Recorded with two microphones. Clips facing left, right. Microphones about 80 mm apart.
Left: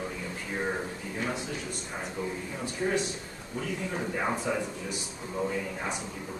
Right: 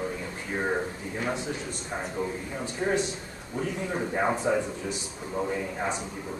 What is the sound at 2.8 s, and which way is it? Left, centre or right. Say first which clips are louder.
Speech: right 2 dB; right.